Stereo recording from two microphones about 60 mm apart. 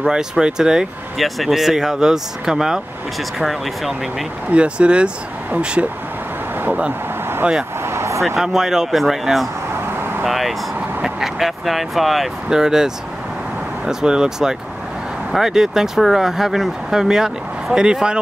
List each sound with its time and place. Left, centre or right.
0.0 s speech: centre
1.1 s speech: centre
4.5 s speech: centre
7.8 s vehicle: right
8.4 s speech: centre